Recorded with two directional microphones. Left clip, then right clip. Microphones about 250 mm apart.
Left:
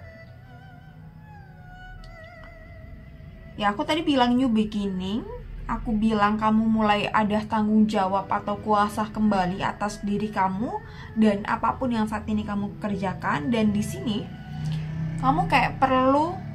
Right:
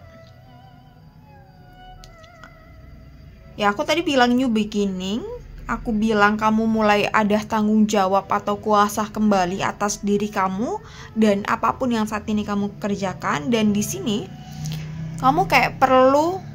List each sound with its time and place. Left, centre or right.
3.5 s a woman's voice: right